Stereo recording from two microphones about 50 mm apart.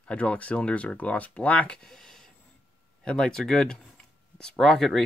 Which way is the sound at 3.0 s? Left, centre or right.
Centre.